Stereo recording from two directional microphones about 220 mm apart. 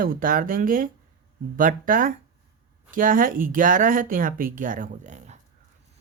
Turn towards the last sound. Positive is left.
turn(degrees=-35)  # may be behind; listen again after turning